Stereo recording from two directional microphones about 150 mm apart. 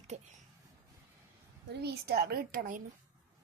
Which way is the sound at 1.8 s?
90° right.